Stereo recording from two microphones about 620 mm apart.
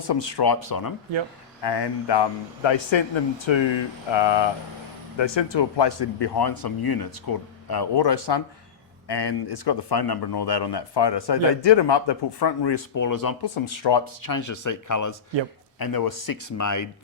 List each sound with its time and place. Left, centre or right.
0.1 s speech: left